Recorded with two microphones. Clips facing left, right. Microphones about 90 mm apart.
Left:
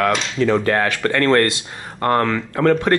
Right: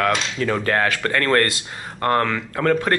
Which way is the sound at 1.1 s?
25° left (ahead or behind).